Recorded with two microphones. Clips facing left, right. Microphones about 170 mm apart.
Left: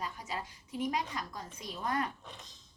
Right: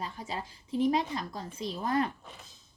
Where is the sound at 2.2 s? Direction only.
5° right (ahead or behind).